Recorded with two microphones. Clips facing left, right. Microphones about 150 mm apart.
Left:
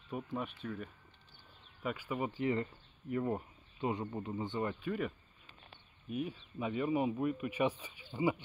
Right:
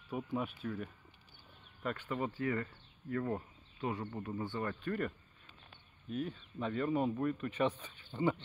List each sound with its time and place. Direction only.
0.1 s speech: 5° right (ahead or behind)
1.8 s speech: 5° left (ahead or behind)
2.4 s speech: 25° left (ahead or behind)
4.8 s a sound: 5° left (ahead or behind)
6.0 s speech: 10° left (ahead or behind)